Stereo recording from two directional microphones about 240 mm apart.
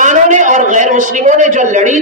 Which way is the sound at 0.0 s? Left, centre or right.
Right.